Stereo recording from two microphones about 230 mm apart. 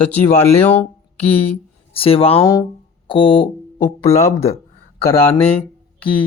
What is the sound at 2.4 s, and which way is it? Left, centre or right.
Speech, centre.